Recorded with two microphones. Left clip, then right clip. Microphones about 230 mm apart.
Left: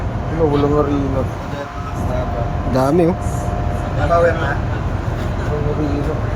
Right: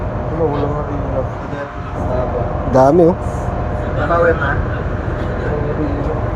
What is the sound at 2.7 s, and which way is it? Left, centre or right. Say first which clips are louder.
Speech: right 6 dB; centre.